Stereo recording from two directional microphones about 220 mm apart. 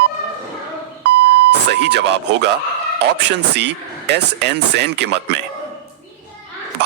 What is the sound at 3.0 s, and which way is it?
Speech, 50° right (ahead or behind).